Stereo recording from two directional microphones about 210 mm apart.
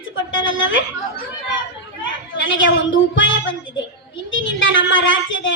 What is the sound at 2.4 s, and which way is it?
Speech, 65° left (ahead or behind).